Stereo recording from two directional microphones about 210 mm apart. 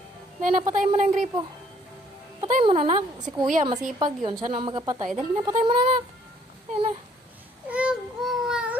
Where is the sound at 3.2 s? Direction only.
20° right (ahead or behind).